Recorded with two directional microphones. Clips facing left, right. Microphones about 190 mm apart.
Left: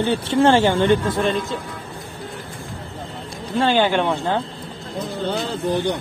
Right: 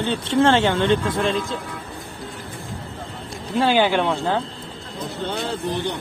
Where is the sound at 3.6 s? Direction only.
5° right (ahead or behind).